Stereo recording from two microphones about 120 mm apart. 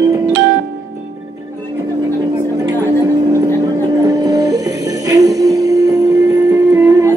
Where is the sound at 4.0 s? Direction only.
30° right (ahead or behind).